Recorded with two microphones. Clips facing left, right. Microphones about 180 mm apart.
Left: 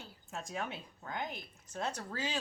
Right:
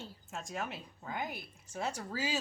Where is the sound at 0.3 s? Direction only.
Centre (ahead or behind).